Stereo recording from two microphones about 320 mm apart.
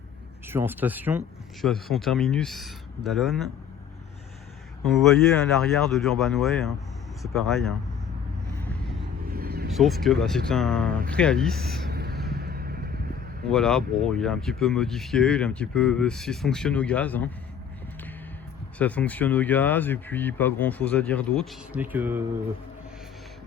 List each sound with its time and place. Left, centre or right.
0.4 s speech: centre
4.8 s speech: centre
9.3 s vehicle: right
9.7 s speech: centre
11.9 s vehicle: right
13.5 s speech: centre
18.8 s speech: centre